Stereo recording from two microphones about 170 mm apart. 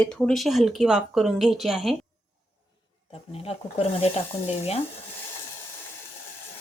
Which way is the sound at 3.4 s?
35° left (ahead or behind).